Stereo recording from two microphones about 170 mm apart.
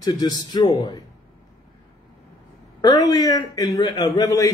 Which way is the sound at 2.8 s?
20° left (ahead or behind).